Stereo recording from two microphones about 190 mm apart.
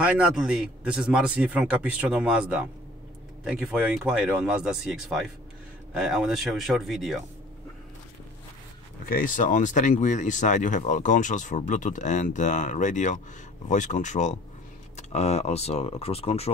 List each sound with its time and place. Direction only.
0.0 s speech: 5° right (ahead or behind)
9.1 s speech: 45° left (ahead or behind)